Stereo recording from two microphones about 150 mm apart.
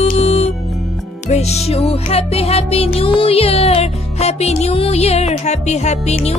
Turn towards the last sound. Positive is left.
turn(degrees=50)  # may be behind; listen again after turning